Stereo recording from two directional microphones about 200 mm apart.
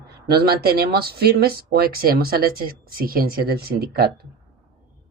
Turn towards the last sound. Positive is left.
turn(degrees=-50)  # may be behind; listen again after turning